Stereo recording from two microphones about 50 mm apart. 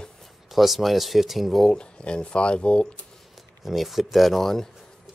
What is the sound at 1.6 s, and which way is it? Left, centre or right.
Speech, centre.